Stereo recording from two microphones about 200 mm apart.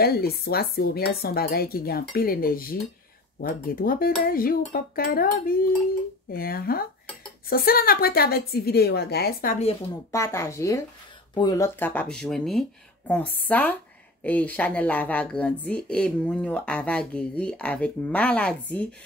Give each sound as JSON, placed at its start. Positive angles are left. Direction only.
{"t": 0.0, "sound": "speech", "side_deg": 50}
{"t": 10.1, "sound": "a woman's voice", "side_deg": 15}